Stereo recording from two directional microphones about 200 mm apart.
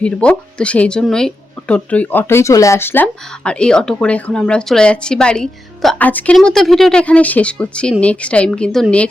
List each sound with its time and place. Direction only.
0.0 s speech: 5° left (ahead or behind)